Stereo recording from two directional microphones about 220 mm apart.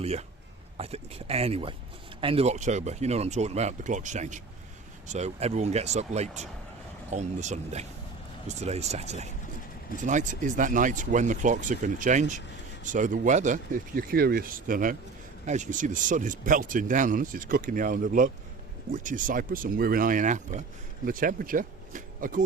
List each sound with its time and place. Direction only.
0.0 s speech: 30° right (ahead or behind)